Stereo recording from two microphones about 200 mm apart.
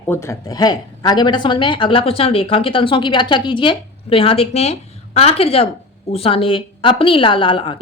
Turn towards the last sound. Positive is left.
turn(degrees=25)  # may be behind; listen again after turning